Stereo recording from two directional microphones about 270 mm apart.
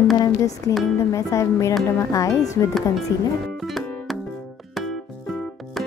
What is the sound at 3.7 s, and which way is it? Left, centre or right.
Music, centre.